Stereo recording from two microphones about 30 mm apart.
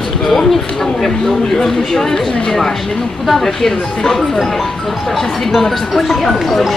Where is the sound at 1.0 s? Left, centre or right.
Centre.